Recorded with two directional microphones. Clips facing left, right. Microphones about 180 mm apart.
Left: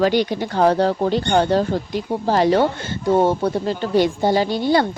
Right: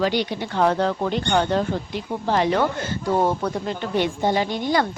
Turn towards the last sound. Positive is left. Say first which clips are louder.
# left 4 dB
turn(degrees=30)  # may be behind; listen again after turning